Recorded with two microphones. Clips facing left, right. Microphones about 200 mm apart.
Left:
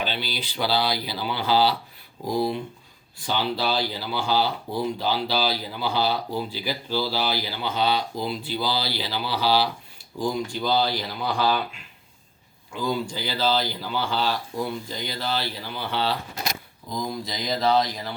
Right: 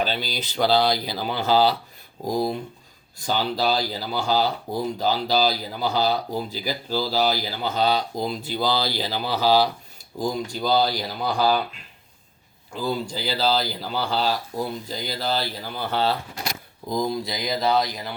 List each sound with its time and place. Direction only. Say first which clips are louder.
0.0 s speech: right 3 dB; 40° right (ahead or behind)
12.7 s speech: even; 35° right (ahead or behind)
17.2 s speech: even; 10° right (ahead or behind)